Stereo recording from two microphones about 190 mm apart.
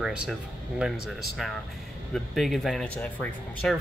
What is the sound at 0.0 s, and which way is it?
Speech, 5° right (ahead or behind).